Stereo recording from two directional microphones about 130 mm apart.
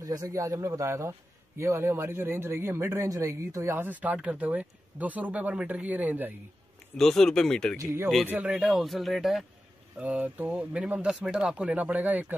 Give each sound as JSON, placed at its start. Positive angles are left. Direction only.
{"t": 0.0, "sound": "a man's voice", "side_deg": -25}
{"t": 7.0, "sound": "speech", "side_deg": 5}
{"t": 7.8, "sound": "a man's voice", "side_deg": -20}
{"t": 8.3, "sound": "a man's voice", "side_deg": -10}